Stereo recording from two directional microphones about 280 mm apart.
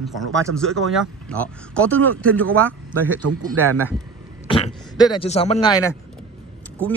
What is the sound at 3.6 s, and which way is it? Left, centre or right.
Speech, right.